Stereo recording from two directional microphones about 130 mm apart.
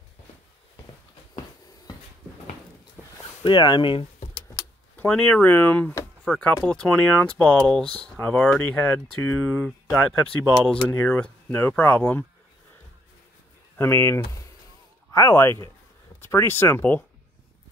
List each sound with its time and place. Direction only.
3.4 s speech: 35° left (ahead or behind)
4.9 s speech: 10° left (ahead or behind)
13.7 s speech: 20° left (ahead or behind)